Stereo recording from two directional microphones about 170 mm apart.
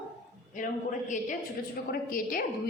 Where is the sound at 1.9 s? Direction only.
55° left (ahead or behind).